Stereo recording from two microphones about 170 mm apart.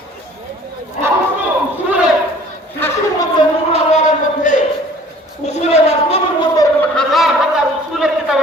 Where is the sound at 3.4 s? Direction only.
40° left (ahead or behind).